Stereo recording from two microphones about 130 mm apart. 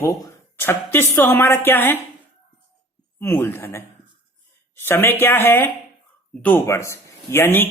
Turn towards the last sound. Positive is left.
turn(degrees=15)  # may be behind; listen again after turning